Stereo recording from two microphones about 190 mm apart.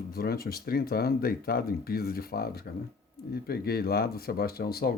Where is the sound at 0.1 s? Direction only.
50° left (ahead or behind).